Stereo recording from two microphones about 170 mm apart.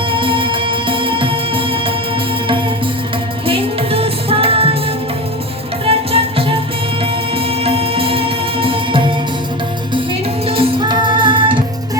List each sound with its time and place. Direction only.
0.1 s music: 30° right (ahead or behind)
3.4 s music: 35° right (ahead or behind)
5.8 s music: 35° right (ahead or behind)
10.5 s music: 30° right (ahead or behind)